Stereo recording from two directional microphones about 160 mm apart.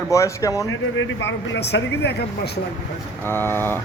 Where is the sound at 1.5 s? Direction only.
90° left.